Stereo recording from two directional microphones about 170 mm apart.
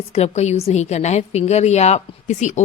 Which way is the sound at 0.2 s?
40° left (ahead or behind).